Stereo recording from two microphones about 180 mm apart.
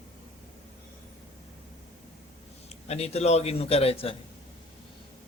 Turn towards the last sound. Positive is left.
turn(degrees=35)  # may be behind; listen again after turning